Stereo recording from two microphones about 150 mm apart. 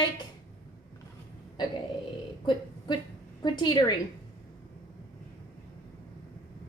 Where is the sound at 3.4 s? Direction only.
30° left (ahead or behind).